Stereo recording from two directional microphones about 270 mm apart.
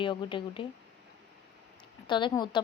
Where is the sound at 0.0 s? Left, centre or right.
Centre.